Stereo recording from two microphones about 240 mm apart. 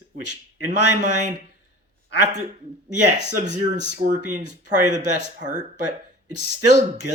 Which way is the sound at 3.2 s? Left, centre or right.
Right.